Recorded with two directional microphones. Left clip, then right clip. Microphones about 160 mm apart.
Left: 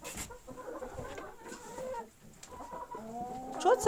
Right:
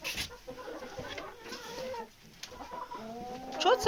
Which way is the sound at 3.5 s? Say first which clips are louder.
Right 1 dB; 30° left (ahead or behind).